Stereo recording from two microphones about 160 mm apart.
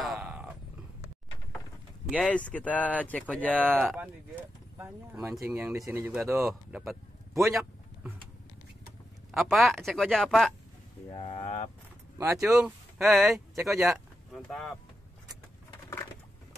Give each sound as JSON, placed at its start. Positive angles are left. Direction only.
{"t": 0.0, "sound": "a sound", "side_deg": -5}
{"t": 2.2, "sound": "speech", "side_deg": 10}
{"t": 4.7, "sound": "speech", "side_deg": -15}
{"t": 6.7, "sound": "speech", "side_deg": 0}
{"t": 7.4, "sound": "a sound", "side_deg": 0}
{"t": 9.3, "sound": "speech", "side_deg": 0}
{"t": 11.1, "sound": "speech", "side_deg": 35}
{"t": 12.2, "sound": "speech", "side_deg": -20}
{"t": 12.5, "sound": "speech", "side_deg": 0}